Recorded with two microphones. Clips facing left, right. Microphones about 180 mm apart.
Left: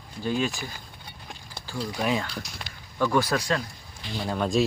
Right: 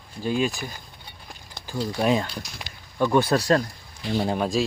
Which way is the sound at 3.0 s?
20° right (ahead or behind).